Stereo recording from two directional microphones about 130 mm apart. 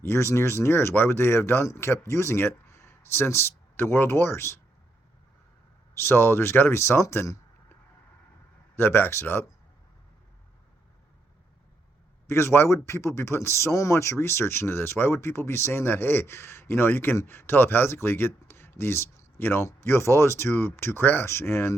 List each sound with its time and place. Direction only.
0.0 s speech: 20° left (ahead or behind)
6.0 s speech: 20° left (ahead or behind)
8.7 s speech: 15° left (ahead or behind)
12.3 s speech: 20° left (ahead or behind)